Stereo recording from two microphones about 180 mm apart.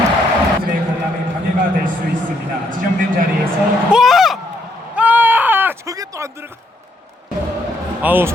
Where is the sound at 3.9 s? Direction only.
Centre (ahead or behind).